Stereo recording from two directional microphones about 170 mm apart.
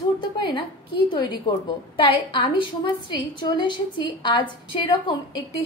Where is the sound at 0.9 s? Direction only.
25° left (ahead or behind).